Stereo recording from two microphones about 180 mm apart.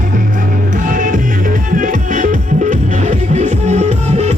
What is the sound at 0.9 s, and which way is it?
Music, 45° right (ahead or behind).